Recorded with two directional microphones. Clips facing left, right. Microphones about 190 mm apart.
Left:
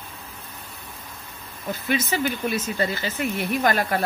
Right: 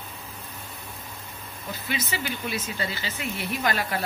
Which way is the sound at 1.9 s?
50° left (ahead or behind).